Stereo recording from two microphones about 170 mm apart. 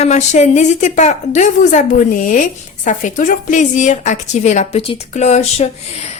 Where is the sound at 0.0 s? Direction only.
40° left (ahead or behind).